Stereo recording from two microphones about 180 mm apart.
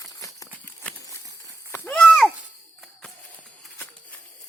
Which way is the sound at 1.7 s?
10° left (ahead or behind).